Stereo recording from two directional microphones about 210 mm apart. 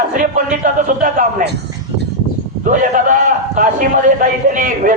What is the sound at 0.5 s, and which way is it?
A man's voice, 35° right (ahead or behind).